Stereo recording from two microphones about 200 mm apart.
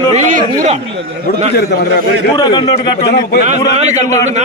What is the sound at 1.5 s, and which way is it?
Speech, 55° left (ahead or behind).